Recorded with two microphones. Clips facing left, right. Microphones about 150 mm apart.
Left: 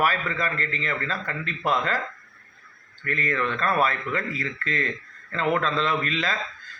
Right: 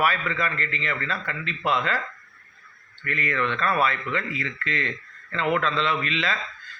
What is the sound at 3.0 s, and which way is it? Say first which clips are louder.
A man's voice: even; 35° left (ahead or behind).